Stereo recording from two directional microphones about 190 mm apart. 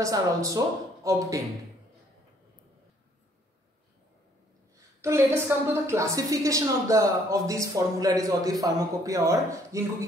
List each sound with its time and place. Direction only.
0.0 s a woman's voice: 15° right (ahead or behind)
5.0 s a woman's voice: 15° right (ahead or behind)